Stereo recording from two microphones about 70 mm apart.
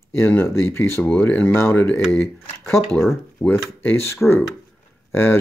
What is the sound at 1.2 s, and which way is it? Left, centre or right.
Speech, left.